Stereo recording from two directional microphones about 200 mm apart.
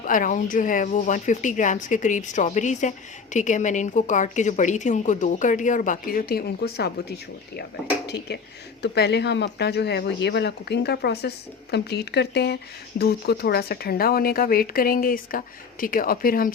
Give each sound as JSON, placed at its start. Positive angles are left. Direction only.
{"t": 0.0, "sound": "a woman's voice", "side_deg": 40}
{"t": 8.0, "sound": "speech", "side_deg": 55}